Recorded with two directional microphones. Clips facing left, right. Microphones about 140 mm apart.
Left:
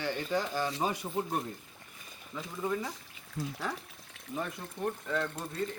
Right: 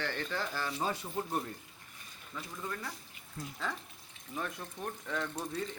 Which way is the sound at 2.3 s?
15° left (ahead or behind).